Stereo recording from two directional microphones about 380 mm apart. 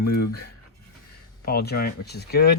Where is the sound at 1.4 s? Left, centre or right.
Left.